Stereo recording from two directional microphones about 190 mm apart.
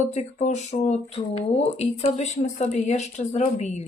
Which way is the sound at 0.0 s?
35° left (ahead or behind).